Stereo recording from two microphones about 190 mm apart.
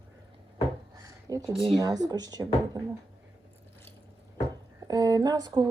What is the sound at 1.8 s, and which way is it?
Speech, 20° right (ahead or behind).